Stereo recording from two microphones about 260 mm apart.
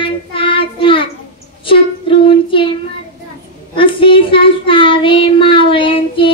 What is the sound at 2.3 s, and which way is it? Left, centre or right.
Child singing, centre.